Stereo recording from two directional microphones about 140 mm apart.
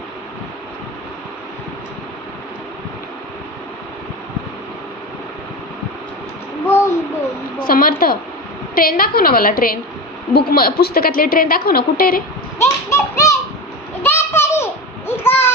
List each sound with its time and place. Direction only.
7.6 s a woman's voice: 90° left
12.5 s speech: 20° left (ahead or behind)
14.0 s a sound: 15° left (ahead or behind)